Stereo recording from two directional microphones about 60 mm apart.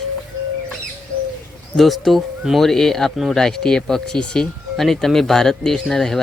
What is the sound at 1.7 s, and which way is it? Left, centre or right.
Speech, centre.